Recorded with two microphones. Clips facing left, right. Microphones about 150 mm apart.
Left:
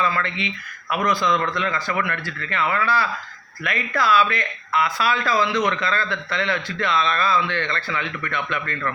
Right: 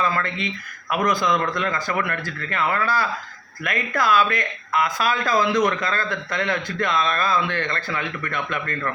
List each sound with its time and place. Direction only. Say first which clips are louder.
0.0 s speech: even; 45° right (ahead or behind)